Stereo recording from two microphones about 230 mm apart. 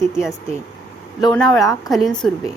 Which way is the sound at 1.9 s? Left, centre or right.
Centre.